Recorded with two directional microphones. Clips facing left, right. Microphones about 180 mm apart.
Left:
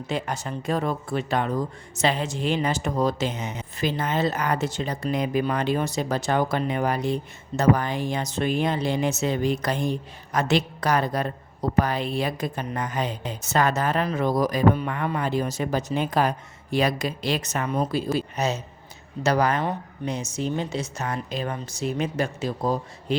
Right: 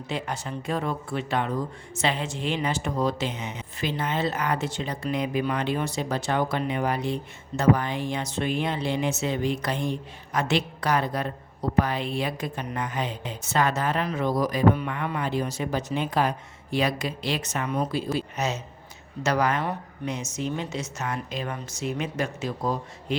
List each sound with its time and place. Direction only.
0.1 s speech: 45° left (ahead or behind)